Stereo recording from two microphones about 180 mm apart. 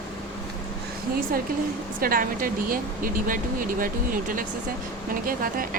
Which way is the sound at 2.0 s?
50° right (ahead or behind).